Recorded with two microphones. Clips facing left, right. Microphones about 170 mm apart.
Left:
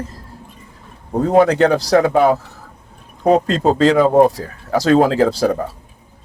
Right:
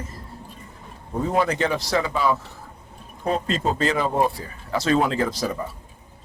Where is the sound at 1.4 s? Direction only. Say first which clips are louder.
Left 10 dB; 70° left (ahead or behind).